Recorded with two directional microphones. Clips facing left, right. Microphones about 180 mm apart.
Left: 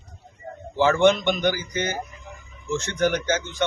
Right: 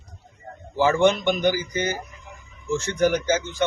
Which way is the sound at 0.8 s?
5° right (ahead or behind).